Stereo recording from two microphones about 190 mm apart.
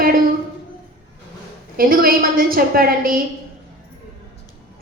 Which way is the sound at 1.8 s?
50° right (ahead or behind).